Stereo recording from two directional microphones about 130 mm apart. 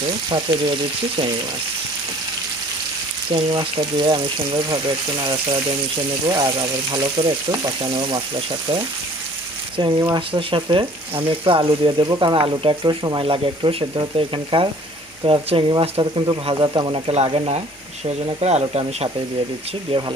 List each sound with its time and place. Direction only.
0.3 s speech: 35° right (ahead or behind)
3.2 s speech: 40° right (ahead or behind)
9.7 s speech: 40° right (ahead or behind)
19.9 s speech: 35° right (ahead or behind)